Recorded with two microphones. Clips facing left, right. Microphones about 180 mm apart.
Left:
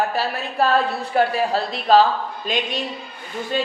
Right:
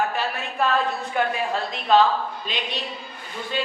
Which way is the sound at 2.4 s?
45° left (ahead or behind).